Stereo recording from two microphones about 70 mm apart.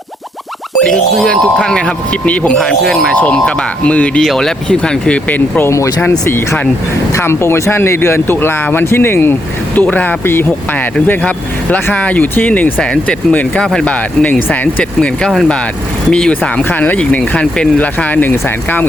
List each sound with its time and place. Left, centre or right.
0.8 s speech: centre
4.2 s speech: centre
6.0 s speech: left
11.2 s speech: centre
16.0 s speech: centre
16.6 s speech: left